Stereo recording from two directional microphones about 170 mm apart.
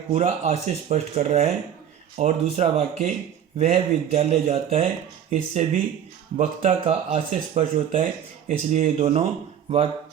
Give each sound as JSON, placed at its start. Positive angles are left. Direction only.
{"t": 0.1, "sound": "speech", "side_deg": -45}